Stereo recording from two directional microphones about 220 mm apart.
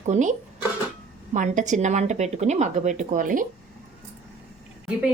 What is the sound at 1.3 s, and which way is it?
A woman's voice, 35° right (ahead or behind).